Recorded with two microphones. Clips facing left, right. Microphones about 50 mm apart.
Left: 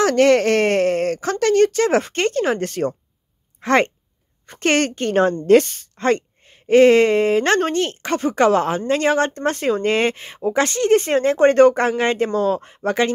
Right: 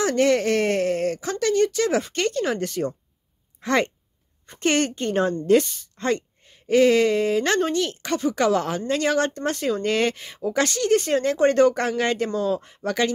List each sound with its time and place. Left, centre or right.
0.0 s a woman's voice: left